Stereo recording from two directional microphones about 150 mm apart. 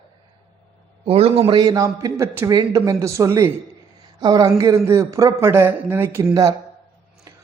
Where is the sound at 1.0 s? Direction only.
40° right (ahead or behind).